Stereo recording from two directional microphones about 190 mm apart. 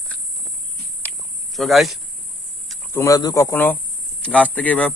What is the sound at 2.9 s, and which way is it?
Speech, 15° left (ahead or behind).